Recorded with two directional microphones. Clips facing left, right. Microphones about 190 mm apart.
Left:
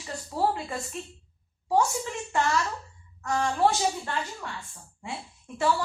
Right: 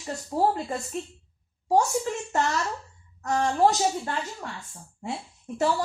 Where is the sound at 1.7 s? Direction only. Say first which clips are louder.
Right 2 dB; 40° right (ahead or behind).